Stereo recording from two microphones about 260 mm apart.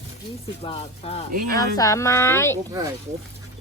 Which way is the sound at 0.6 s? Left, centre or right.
Left.